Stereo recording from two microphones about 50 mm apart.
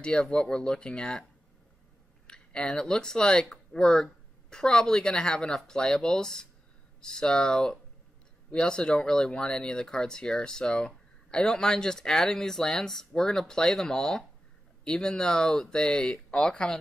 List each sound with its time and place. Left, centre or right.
0.0 s speech: centre
2.2 s speech: centre